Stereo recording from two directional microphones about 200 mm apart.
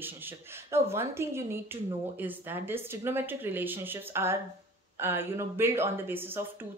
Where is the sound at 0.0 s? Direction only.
10° right (ahead or behind).